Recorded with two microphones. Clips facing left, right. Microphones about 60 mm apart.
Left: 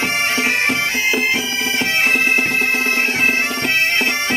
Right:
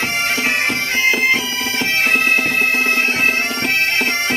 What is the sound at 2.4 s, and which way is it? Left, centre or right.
Music, left.